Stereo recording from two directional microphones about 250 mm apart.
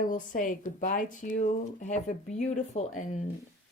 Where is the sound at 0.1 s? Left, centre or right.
Left.